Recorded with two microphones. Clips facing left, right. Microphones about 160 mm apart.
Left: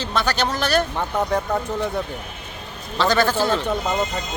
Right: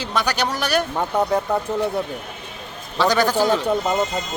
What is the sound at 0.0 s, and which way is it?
Speech, 10° right (ahead or behind).